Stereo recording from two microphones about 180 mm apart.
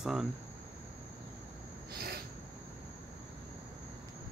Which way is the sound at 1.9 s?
60° right (ahead or behind).